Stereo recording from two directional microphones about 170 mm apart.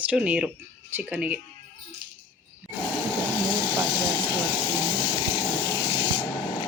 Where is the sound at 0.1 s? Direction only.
5° right (ahead or behind).